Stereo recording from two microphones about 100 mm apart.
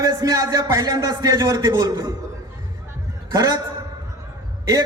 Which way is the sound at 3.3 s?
35° right (ahead or behind).